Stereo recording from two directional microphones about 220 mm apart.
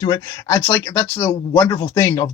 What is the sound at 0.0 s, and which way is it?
Speech, 20° left (ahead or behind).